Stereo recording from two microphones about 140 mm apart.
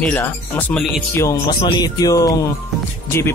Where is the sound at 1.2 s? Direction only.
30° left (ahead or behind).